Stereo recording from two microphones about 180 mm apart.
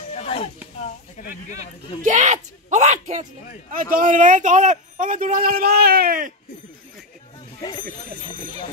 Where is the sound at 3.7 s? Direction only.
50° right (ahead or behind).